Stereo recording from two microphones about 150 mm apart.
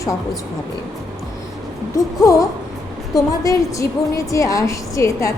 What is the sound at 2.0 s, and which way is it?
A woman's voice, 20° left (ahead or behind).